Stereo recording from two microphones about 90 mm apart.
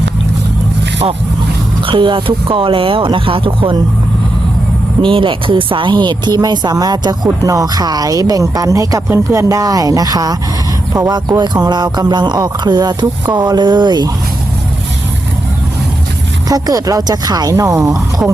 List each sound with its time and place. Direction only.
1.9 s speech: 70° right (ahead or behind)
5.0 s speech: 75° right (ahead or behind); by 10.3 s 45° right (ahead or behind)
11.1 s speech: 55° right (ahead or behind)
16.5 s speech: 45° right (ahead or behind)